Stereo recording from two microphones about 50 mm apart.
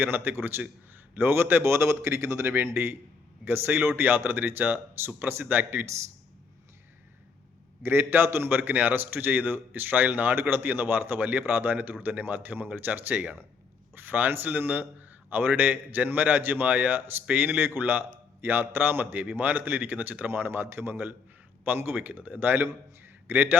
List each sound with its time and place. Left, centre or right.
0.0 s a man's voice: right
7.8 s a man's voice: right